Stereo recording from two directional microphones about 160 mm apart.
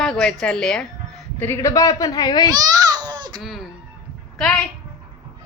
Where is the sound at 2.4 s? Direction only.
25° right (ahead or behind).